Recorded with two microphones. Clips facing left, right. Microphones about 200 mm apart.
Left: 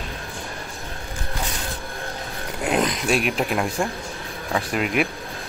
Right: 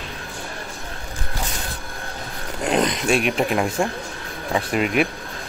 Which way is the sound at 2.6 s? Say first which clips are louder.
Right 2 dB; centre (ahead or behind).